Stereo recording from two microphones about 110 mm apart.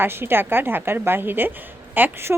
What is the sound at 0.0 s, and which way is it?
A woman's voice, 20° right (ahead or behind).